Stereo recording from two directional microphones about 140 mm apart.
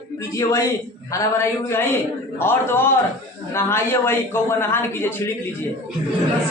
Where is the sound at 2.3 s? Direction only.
15° left (ahead or behind).